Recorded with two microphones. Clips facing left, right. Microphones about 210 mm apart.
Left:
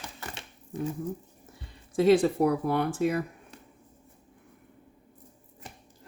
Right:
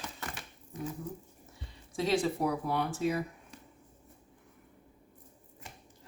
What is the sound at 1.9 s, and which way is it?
Speech, 55° left (ahead or behind).